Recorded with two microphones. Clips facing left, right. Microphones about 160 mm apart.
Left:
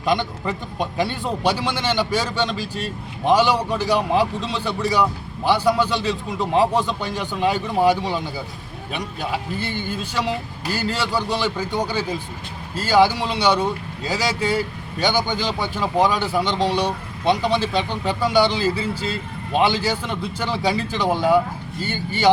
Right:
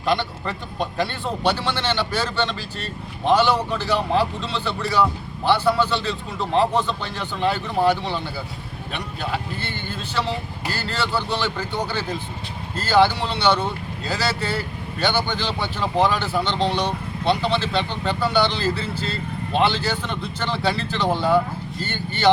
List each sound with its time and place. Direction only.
0.0 s speech: 15° left (ahead or behind)